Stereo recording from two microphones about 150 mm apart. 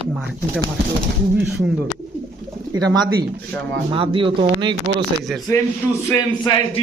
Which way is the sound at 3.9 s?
35° right (ahead or behind).